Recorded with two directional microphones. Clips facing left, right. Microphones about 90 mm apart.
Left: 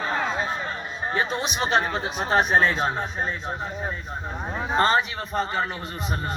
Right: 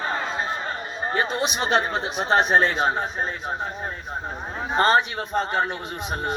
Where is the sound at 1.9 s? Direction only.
20° right (ahead or behind).